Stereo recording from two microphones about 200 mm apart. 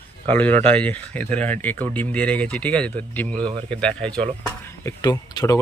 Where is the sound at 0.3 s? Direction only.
10° left (ahead or behind).